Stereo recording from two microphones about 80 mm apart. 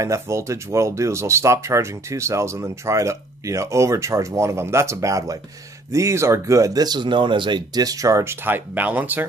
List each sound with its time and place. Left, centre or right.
0.0 s speech: right